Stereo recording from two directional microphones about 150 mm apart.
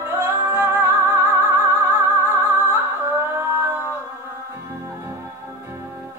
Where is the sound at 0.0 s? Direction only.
15° right (ahead or behind).